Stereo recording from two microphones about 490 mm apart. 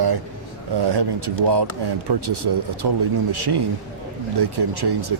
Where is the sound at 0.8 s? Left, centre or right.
Right.